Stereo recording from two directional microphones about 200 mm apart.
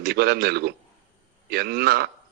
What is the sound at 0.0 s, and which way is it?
A man's voice, 50° right (ahead or behind).